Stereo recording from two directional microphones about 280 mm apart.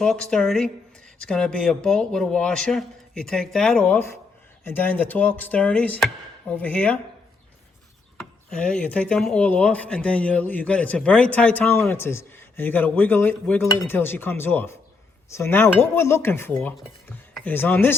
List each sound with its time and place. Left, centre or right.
0.0 s speech: centre
8.4 s speech: centre